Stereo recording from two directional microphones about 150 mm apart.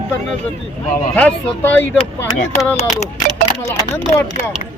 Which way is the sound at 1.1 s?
10° left (ahead or behind).